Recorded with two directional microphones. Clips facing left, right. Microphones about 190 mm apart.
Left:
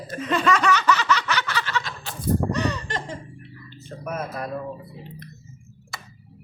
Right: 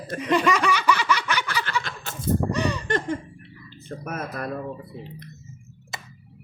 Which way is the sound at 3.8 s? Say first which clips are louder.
Left 1 dB; 55° right (ahead or behind).